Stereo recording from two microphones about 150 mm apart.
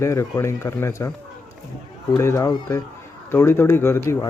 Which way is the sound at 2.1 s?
20° left (ahead or behind).